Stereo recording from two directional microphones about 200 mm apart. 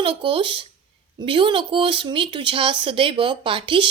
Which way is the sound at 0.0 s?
25° right (ahead or behind).